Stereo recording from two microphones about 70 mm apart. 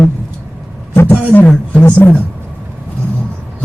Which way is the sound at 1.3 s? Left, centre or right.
Left.